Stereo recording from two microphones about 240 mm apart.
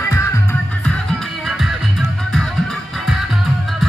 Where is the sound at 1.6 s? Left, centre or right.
Centre.